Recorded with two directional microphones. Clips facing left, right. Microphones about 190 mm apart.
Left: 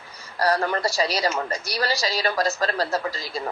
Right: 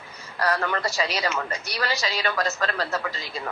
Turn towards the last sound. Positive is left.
turn(degrees=35)  # may be behind; listen again after turning